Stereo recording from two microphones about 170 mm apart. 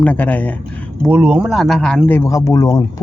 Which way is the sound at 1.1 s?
15° right (ahead or behind).